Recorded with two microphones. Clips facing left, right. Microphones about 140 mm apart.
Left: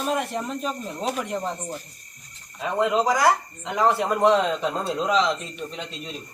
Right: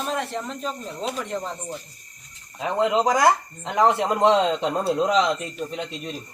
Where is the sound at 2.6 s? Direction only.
20° right (ahead or behind).